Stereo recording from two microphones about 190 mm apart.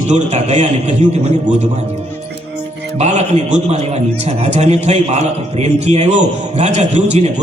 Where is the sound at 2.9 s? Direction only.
35° right (ahead or behind).